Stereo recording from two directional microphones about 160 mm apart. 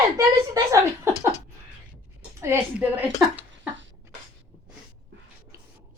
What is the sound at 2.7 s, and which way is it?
Speech, 10° right (ahead or behind).